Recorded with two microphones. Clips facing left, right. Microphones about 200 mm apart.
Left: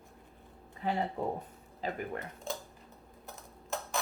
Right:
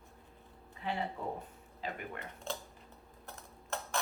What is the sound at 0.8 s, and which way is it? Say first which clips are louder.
Speech: left 5 dB; 40° left (ahead or behind).